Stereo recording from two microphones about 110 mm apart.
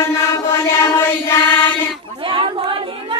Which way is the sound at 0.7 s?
20° left (ahead or behind).